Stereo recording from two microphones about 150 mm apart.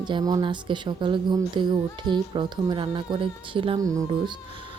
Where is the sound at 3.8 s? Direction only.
20° right (ahead or behind).